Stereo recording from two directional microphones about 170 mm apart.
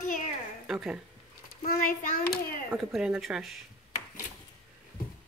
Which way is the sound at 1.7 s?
55° left (ahead or behind).